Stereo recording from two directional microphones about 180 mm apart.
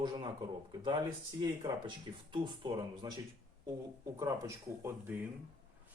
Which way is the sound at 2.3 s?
25° right (ahead or behind).